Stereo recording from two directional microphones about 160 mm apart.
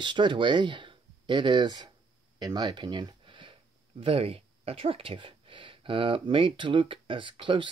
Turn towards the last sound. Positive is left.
turn(degrees=-30)  # may be behind; listen again after turning